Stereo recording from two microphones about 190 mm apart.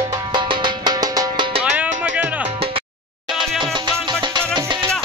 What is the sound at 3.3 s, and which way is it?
Music, 25° right (ahead or behind).